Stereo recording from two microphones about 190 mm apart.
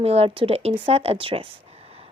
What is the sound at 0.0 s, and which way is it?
Speech, 30° right (ahead or behind).